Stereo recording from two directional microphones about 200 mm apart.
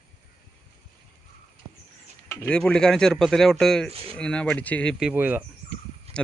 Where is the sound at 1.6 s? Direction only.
20° right (ahead or behind).